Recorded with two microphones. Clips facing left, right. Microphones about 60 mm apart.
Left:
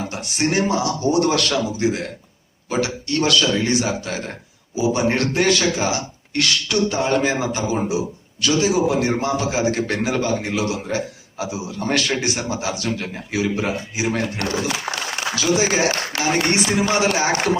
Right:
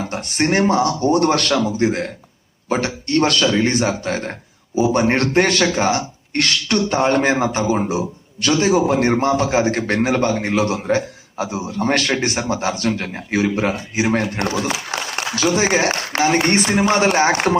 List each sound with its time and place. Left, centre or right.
0.0 s a man's voice: right
14.9 s applause: left
15.5 s a man's voice: right